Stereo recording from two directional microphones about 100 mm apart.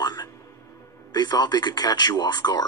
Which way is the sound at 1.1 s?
45° left (ahead or behind).